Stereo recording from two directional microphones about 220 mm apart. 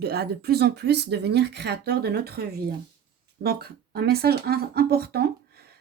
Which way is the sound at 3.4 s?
45° right (ahead or behind).